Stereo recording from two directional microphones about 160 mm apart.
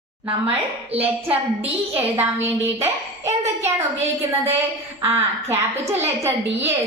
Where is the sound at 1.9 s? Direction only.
15° right (ahead or behind).